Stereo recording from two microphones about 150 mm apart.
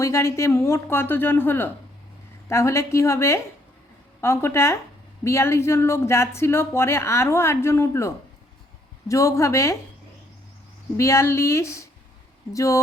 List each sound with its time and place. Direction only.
0.0 s a woman's voice: 20° left (ahead or behind)
10.9 s a woman's voice: 20° left (ahead or behind)